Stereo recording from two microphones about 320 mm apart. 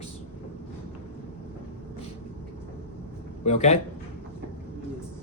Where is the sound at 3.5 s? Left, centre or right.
Left.